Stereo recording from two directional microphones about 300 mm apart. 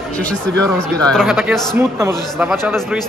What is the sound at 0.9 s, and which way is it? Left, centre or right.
A man's voice, centre.